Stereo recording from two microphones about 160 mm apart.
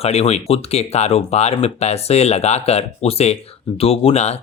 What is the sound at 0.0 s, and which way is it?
Speech, 40° left (ahead or behind).